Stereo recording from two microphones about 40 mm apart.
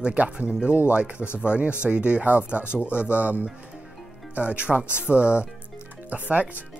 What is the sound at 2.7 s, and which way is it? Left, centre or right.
Speech, left.